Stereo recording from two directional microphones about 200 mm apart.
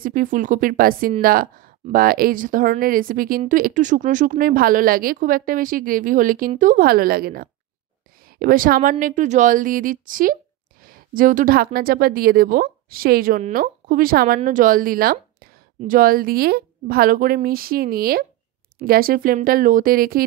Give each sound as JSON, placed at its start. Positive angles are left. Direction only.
{"t": 0.0, "sound": "a woman's voice", "side_deg": -45}